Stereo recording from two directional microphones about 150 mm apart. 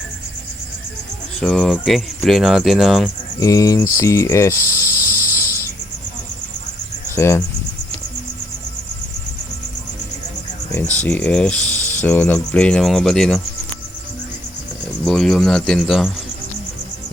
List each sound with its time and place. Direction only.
1.4 s speech: 5° left (ahead or behind)
3.4 s speech: 20° left (ahead or behind)
7.2 s speech: 20° left (ahead or behind)
10.8 s speech: 10° left (ahead or behind)
15.0 s speech: 5° left (ahead or behind)